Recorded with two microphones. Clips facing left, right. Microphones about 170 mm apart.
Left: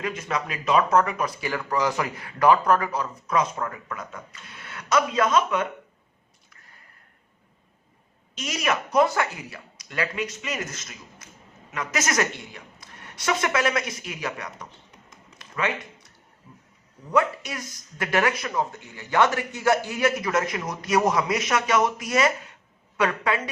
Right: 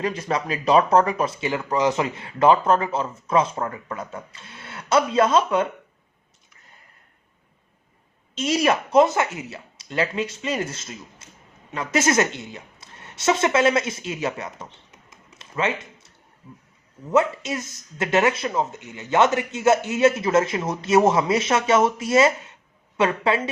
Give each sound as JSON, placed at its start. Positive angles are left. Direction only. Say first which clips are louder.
{"t": 0.0, "sound": "speech", "louder": "right 4 dB", "side_deg": -35}
{"t": 8.4, "sound": "speech", "louder": "right 6 dB", "side_deg": -30}
{"t": 15.4, "sound": "a sound", "louder": "right 3 dB", "side_deg": -25}
{"t": 17.1, "sound": "speech", "louder": "right 3 dB", "side_deg": -25}